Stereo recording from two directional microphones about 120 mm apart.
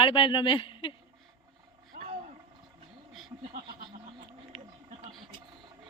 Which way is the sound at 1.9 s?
90° right.